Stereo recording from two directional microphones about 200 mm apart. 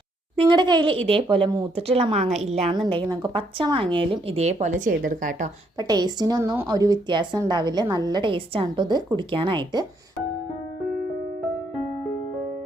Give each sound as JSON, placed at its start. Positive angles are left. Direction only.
{"t": 0.3, "sound": "a woman's voice", "side_deg": -25}
{"t": 5.7, "sound": "a woman's voice", "side_deg": -20}